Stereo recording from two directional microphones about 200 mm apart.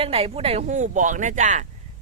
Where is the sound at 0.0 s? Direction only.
30° right (ahead or behind).